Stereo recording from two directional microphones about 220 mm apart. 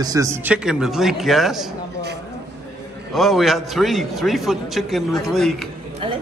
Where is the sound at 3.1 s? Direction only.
Centre (ahead or behind).